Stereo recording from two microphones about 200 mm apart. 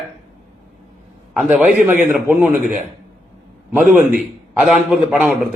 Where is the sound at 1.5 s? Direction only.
5° right (ahead or behind).